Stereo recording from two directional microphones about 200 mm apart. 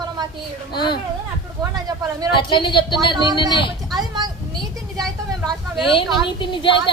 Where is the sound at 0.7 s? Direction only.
20° left (ahead or behind).